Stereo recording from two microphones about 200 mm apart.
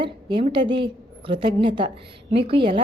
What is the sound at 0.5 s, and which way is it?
A woman's voice, 25° right (ahead or behind).